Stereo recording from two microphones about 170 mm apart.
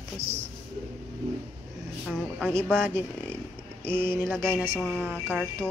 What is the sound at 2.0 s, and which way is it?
Speech, centre (ahead or behind).